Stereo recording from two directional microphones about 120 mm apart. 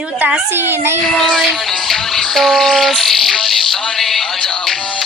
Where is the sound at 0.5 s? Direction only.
20° right (ahead or behind).